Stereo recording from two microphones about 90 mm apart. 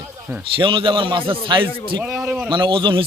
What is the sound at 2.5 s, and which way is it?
Speech, 65° right (ahead or behind).